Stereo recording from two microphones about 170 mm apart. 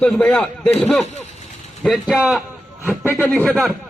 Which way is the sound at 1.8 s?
Centre (ahead or behind).